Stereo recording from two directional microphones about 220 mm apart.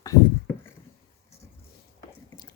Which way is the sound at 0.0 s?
10° left (ahead or behind).